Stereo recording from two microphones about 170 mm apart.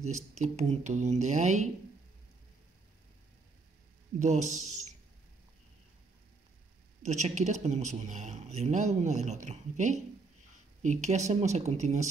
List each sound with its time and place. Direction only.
0.0 s speech: 40° right (ahead or behind)
4.2 s speech: 45° right (ahead or behind)
7.1 s speech: 45° right (ahead or behind)